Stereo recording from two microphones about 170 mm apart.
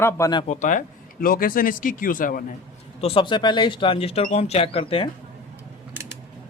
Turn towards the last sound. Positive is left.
turn(degrees=35)  # may be behind; listen again after turning